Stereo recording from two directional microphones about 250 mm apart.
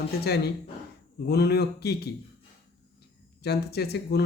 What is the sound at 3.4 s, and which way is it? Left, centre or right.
Speech, left.